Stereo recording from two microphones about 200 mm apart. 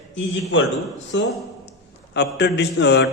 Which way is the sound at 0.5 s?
65° left (ahead or behind).